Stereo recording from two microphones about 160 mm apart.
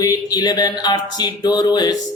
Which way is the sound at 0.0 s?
25° left (ahead or behind).